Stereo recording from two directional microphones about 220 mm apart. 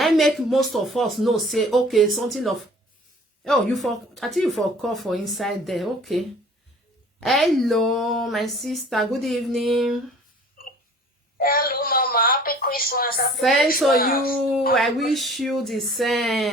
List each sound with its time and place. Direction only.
0.0 s a woman's voice: centre (ahead or behind)
11.3 s a woman's voice: 40° left (ahead or behind)
13.2 s a woman's voice: centre (ahead or behind)
14.0 s speech: 40° left (ahead or behind)
14.3 s a woman's voice: centre (ahead or behind)